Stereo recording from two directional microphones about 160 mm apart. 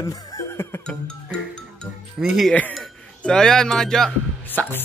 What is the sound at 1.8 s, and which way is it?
Music, centre (ahead or behind).